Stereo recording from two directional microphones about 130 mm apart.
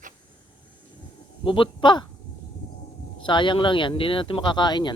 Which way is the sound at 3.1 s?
35° left (ahead or behind).